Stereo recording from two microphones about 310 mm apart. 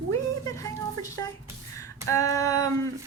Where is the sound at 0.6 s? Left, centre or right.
Centre.